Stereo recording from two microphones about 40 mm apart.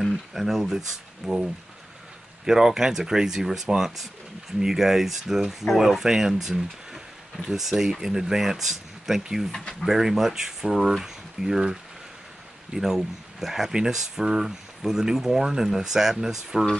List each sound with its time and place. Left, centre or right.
0.0 s speech: centre
2.4 s speech: centre
9.5 s speech: centre
9.8 s speech: centre